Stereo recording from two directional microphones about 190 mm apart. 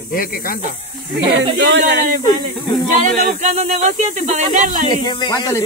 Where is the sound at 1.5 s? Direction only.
70° right (ahead or behind).